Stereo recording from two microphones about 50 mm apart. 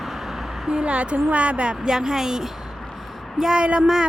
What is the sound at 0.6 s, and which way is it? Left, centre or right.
A woman's voice, centre.